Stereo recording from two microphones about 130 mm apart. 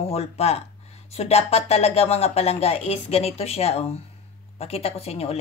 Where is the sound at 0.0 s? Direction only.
50° left (ahead or behind).